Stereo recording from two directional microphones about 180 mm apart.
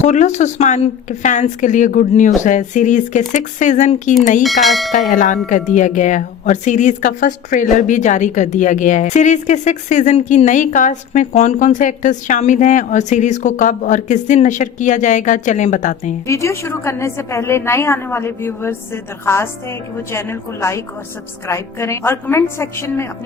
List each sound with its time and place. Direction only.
0.0 s speech: 40° left (ahead or behind)
4.6 s speech: centre (ahead or behind)
4.9 s speech: 45° left (ahead or behind)
16.2 s a woman's voice: 15° left (ahead or behind)